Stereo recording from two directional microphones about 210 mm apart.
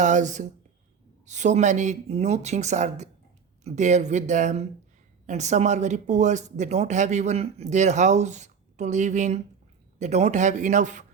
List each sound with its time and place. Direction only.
0.0 s speech: 35° right (ahead or behind)